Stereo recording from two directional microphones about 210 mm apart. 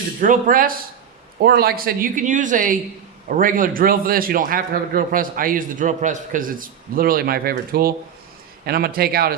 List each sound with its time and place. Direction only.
0.2 s a man's voice: 40° right (ahead or behind)